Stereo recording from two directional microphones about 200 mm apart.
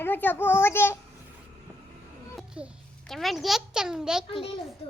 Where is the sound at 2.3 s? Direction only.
Centre (ahead or behind).